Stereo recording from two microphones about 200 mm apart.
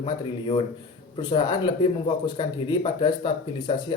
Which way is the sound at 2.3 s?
25° left (ahead or behind).